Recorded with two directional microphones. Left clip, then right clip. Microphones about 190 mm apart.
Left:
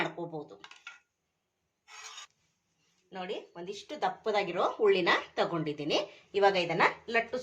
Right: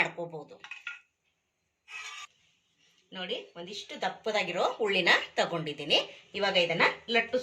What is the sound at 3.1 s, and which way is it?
Speech, 55° left (ahead or behind).